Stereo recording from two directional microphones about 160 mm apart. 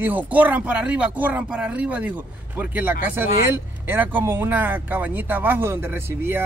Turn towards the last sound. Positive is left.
turn(degrees=-15)  # may be behind; listen again after turning